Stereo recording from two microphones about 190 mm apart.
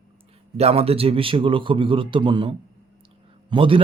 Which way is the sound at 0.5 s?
30° right (ahead or behind).